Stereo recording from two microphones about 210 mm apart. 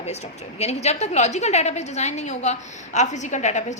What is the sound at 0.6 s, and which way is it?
A woman's voice, 30° left (ahead or behind).